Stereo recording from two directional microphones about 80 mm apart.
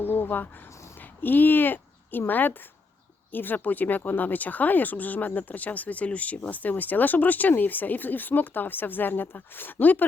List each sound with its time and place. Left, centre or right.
0.0 s speech: left